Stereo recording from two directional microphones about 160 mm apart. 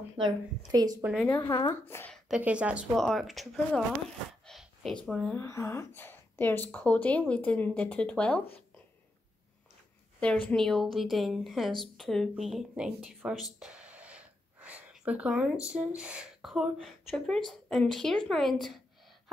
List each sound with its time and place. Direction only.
0.2 s speech: 30° right (ahead or behind)
1.4 s speech: 25° left (ahead or behind)
1.9 s a woman's voice: 15° left (ahead or behind)
2.1 s a woman's voice: 5° right (ahead or behind)
4.5 s a sound: centre (ahead or behind)
5.1 s a woman's voice: 10° left (ahead or behind)
10.5 s a woman's voice: centre (ahead or behind)